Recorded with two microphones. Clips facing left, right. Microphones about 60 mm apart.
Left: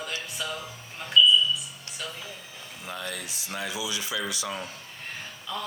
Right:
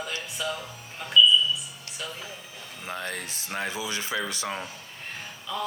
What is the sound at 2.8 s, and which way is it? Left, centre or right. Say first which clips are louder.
Speech: right 2 dB; right.